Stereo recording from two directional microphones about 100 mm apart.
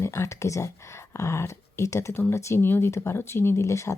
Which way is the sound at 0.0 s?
30° left (ahead or behind).